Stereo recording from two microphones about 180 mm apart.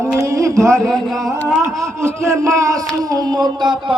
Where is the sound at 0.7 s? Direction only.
5° left (ahead or behind).